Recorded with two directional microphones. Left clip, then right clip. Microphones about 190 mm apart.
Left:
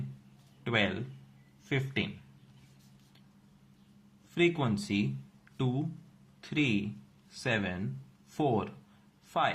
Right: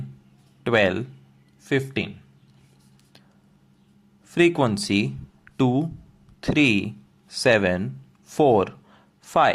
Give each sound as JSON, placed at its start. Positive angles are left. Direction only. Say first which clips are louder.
{"t": 0.6, "sound": "a man's voice", "louder": "right 11 dB", "side_deg": -45}
{"t": 1.7, "sound": "speech", "louder": "right 9 dB", "side_deg": -35}
{"t": 4.4, "sound": "speech", "louder": "right 10 dB", "side_deg": -50}
{"t": 5.5, "sound": "a sound", "louder": "right 13 dB", "side_deg": -50}
{"t": 6.4, "sound": "speech", "louder": "right 11 dB", "side_deg": -50}